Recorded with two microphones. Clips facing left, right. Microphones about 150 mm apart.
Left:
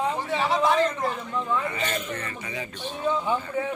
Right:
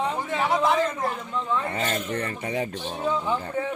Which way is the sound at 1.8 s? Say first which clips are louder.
Right 3 dB; 50° right (ahead or behind).